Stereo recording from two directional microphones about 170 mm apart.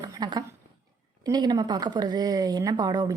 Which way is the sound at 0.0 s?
25° right (ahead or behind).